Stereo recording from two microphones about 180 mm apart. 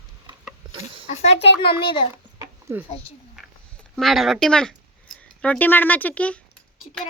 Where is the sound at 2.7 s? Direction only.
15° right (ahead or behind).